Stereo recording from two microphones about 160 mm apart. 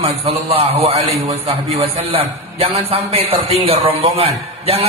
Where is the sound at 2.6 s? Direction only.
35° right (ahead or behind).